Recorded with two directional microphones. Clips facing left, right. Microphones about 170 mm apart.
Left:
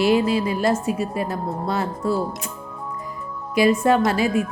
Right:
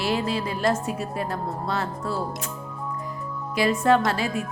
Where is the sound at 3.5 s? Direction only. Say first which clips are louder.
Left 3 dB; 10° left (ahead or behind).